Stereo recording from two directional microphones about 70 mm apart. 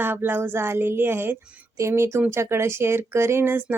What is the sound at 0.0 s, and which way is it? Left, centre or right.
A woman's voice, right.